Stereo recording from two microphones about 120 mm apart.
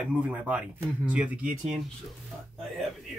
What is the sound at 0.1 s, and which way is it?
Speech, 10° right (ahead or behind).